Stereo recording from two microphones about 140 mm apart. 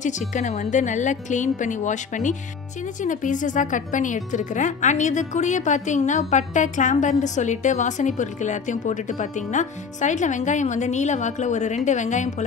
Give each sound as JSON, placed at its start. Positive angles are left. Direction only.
{"t": 0.0, "sound": "speech", "side_deg": 60}